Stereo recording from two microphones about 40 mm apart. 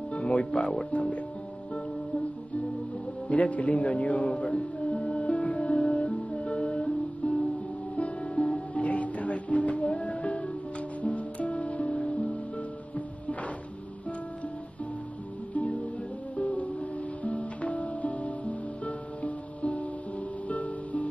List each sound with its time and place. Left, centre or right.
0.1 s speech: left
3.3 s a man's voice: left
4.4 s music: left
12.9 s music: left
15.5 s music: left